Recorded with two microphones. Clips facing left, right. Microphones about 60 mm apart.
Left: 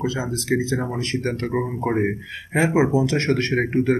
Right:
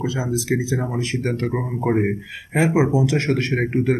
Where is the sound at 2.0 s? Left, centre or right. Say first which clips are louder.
Right 1 dB; centre.